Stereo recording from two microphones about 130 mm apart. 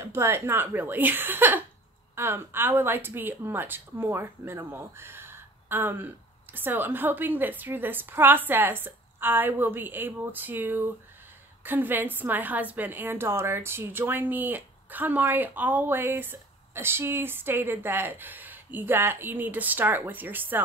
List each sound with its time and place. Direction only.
0.0 s a woman's voice: 20° right (ahead or behind)